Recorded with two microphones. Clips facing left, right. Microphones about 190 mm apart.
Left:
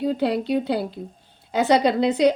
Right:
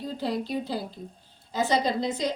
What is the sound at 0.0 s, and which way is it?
A woman's voice, 70° left (ahead or behind).